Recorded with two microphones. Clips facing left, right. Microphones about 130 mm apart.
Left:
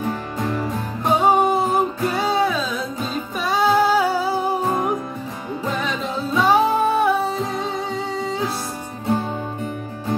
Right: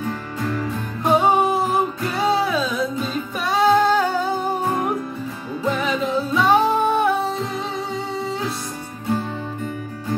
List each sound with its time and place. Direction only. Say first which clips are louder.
0.0 s music: left 2 dB; 20° left (ahead or behind)
1.0 s music: even; centre (ahead or behind)
5.7 s music: right 4 dB; centre (ahead or behind)